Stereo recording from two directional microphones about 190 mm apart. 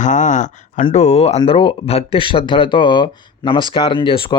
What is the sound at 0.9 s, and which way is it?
Speech, 35° left (ahead or behind).